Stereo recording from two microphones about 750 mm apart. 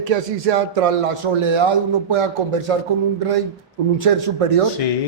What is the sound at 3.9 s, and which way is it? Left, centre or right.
Speech, right.